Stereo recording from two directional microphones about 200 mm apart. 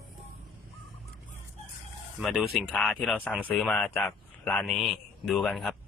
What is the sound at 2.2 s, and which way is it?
A man's voice, centre (ahead or behind).